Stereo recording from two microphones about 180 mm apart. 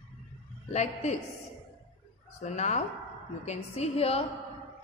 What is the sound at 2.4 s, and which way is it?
A woman's voice, 40° left (ahead or behind).